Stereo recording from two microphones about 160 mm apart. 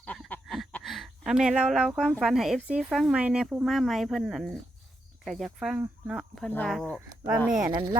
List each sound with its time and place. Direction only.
0.0 s a sound: 10° left (ahead or behind)
2.2 s speech: centre (ahead or behind)
7.7 s speech: 30° right (ahead or behind)